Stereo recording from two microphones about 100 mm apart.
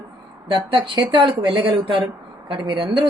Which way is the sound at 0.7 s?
60° right (ahead or behind).